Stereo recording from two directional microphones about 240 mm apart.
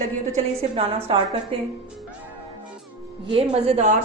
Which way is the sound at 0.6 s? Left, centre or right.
Right.